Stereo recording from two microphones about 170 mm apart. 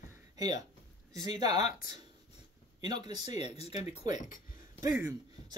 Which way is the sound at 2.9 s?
25° right (ahead or behind).